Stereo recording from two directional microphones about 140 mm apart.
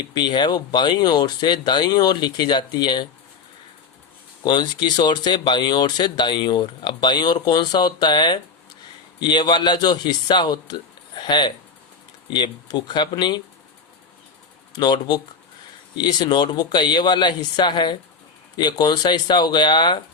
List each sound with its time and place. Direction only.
0.1 s speech: 30° left (ahead or behind)
4.4 s speech: 30° left (ahead or behind)
12.7 s speech: 30° left (ahead or behind)
14.8 s speech: 30° left (ahead or behind)